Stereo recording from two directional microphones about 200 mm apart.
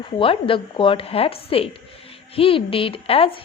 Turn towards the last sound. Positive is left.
turn(degrees=30)  # may be behind; listen again after turning